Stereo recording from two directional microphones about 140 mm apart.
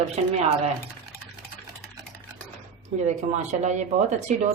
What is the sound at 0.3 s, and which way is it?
Speech, 55° right (ahead or behind).